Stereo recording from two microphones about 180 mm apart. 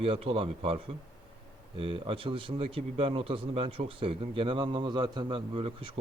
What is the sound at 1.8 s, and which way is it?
A man's voice, 30° right (ahead or behind).